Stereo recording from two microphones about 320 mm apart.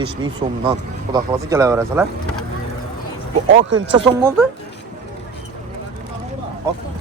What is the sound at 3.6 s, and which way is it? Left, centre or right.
Speech, right.